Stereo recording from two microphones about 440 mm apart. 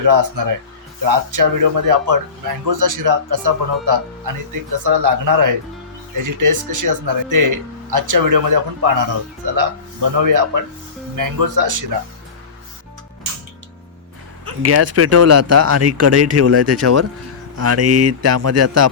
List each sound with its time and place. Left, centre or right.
0.0 s speech: right
10.2 s speech: right
14.4 s speech: right